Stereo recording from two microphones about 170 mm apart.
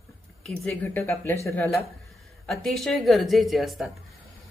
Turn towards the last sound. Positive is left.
turn(degrees=0)  # may be behind; listen again after turning